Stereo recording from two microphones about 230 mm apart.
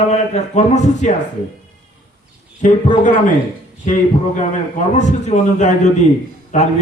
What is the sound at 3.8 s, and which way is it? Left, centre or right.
A man's voice, left.